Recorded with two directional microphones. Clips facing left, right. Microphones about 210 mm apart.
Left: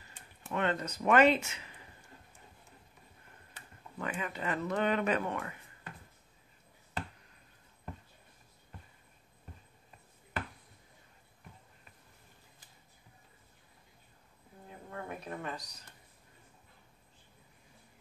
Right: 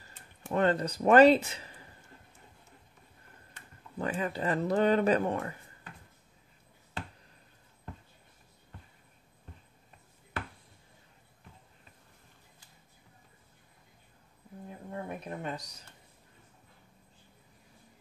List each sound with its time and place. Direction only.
0.5 s speech: 35° right (ahead or behind)
4.0 s speech: 35° right (ahead or behind)
14.9 s a sound: 25° right (ahead or behind)